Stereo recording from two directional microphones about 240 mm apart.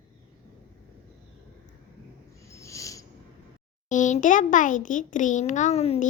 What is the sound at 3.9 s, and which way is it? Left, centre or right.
A child's voice, left.